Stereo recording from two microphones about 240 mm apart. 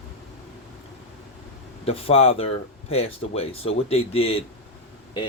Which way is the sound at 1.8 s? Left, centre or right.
Left.